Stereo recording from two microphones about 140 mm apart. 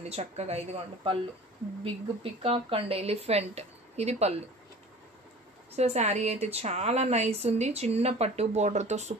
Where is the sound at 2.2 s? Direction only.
45° right (ahead or behind).